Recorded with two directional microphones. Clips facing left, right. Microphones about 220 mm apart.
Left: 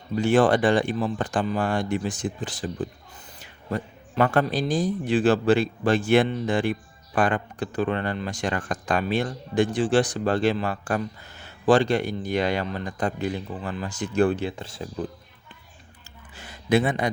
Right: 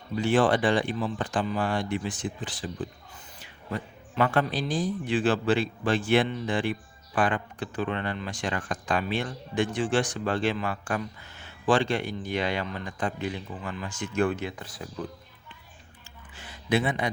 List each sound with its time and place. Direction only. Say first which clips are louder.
0.2 s a man's voice: left 4 dB; 45° left (ahead or behind)
3.7 s a man's voice: left 4 dB; 45° left (ahead or behind); by 14.8 s 25° left (ahead or behind)
16.3 s a sound: left 5 dB; 40° left (ahead or behind)